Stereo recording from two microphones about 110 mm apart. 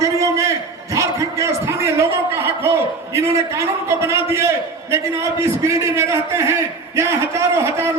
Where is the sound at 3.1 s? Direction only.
25° right (ahead or behind).